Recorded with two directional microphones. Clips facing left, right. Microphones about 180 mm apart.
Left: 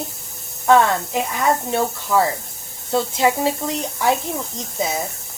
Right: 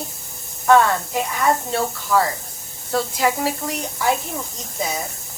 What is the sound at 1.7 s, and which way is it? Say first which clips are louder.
Speech: left 1 dB; 20° left (ahead or behind).